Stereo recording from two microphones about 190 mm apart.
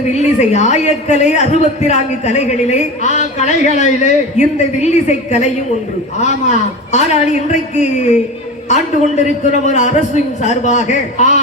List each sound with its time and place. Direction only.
0.1 s a man's voice: 35° left (ahead or behind)